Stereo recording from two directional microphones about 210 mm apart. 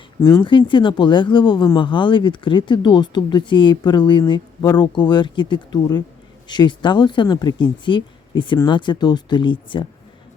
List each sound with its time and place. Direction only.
0.2 s speech: 20° left (ahead or behind)